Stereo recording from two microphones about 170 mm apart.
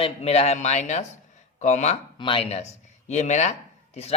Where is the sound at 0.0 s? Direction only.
40° left (ahead or behind).